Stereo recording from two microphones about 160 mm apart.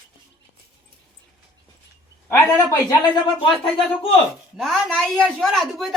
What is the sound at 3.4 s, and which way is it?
Speech, 35° left (ahead or behind).